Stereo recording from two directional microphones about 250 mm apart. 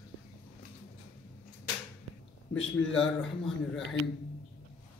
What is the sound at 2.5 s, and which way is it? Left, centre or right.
Speech, left.